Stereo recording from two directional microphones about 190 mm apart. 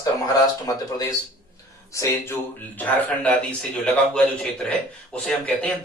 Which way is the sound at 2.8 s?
10° left (ahead or behind).